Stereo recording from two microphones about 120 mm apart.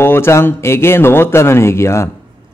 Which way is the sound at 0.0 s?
20° left (ahead or behind).